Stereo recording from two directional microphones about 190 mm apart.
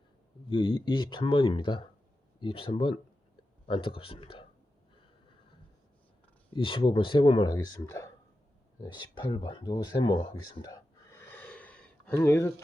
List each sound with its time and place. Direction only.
0.5 s speech: 25° left (ahead or behind)
6.5 s speech: 25° left (ahead or behind)